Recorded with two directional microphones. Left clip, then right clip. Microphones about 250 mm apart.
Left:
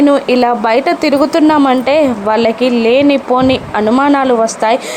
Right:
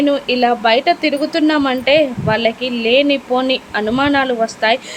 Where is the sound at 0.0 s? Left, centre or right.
Centre.